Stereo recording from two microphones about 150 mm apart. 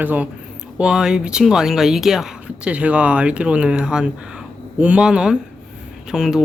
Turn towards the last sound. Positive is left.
turn(degrees=-5)  # may be behind; listen again after turning